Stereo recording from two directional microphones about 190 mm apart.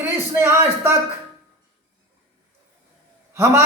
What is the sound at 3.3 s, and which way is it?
Speech, 10° right (ahead or behind).